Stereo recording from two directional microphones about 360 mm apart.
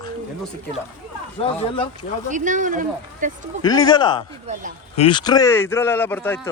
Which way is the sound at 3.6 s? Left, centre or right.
Centre.